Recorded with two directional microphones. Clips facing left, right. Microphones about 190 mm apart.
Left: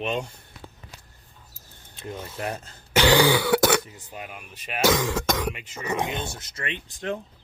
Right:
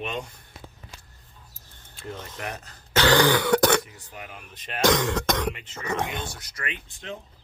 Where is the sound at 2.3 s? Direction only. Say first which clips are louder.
Left 4 dB; 30° left (ahead or behind).